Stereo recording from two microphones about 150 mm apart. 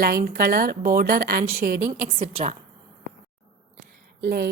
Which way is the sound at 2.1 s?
45° right (ahead or behind).